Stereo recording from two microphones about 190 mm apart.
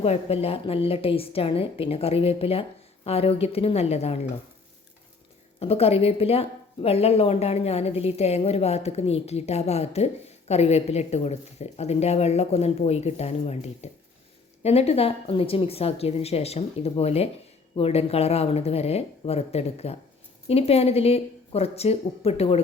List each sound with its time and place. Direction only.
0.0 s speech: 30° left (ahead or behind)
5.5 s speech: 30° left (ahead or behind)